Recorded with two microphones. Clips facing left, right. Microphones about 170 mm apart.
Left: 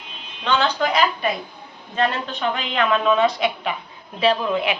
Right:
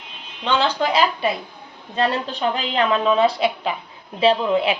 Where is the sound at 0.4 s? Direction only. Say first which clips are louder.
Even; 30° right (ahead or behind).